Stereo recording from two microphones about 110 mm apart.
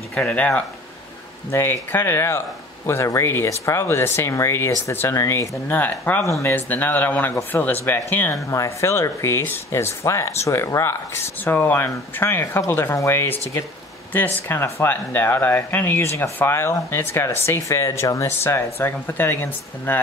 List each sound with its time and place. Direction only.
0.1 s speech: 10° left (ahead or behind)
8.5 s speech: 30° left (ahead or behind)